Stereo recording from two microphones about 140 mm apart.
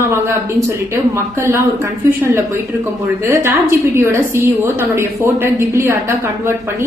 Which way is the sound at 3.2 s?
20° right (ahead or behind).